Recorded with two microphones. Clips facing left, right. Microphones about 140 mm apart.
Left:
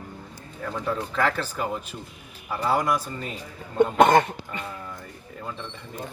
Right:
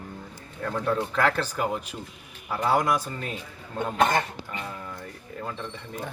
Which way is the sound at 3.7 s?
55° left (ahead or behind).